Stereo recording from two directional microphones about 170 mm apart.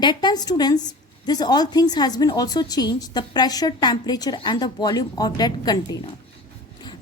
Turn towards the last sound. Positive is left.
turn(degrees=25)  # may be behind; listen again after turning